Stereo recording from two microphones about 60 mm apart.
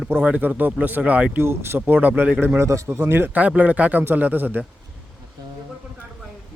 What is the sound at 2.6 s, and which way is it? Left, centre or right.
Speech, right.